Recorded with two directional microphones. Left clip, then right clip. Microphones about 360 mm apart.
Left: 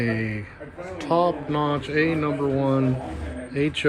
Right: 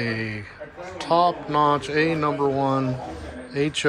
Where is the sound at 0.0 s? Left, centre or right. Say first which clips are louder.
Left 1 dB; centre.